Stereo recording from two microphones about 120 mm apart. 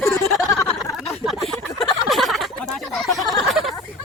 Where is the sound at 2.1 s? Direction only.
Centre (ahead or behind).